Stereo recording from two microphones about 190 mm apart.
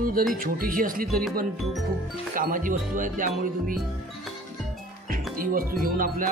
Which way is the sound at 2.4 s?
45° right (ahead or behind).